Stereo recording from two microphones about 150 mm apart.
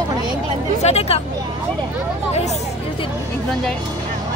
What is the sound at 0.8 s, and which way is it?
Speech, 45° left (ahead or behind).